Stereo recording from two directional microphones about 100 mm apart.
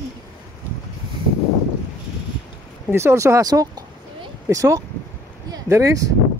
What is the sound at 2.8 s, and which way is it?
Speech, 25° right (ahead or behind).